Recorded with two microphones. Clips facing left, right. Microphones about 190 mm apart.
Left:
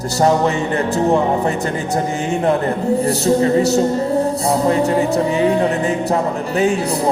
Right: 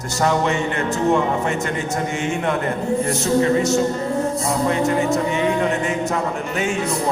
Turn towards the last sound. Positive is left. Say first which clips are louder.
# left 5 dB
turn(degrees=35)  # may be behind; listen again after turning